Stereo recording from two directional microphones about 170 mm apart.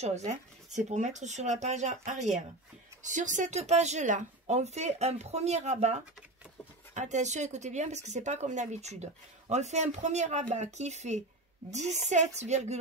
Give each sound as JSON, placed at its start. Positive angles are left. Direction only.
{"t": 0.0, "sound": "speech", "side_deg": -40}